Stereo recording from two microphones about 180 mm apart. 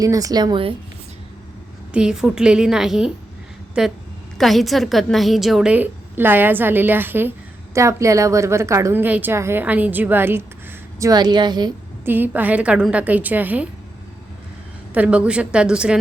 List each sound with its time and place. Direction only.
0.0 s a woman's voice: 20° right (ahead or behind)
1.9 s a woman's voice: 5° right (ahead or behind); by 11.7 s 25° right (ahead or behind)
12.0 s a woman's voice: 10° right (ahead or behind)
14.9 s a woman's voice: 5° right (ahead or behind)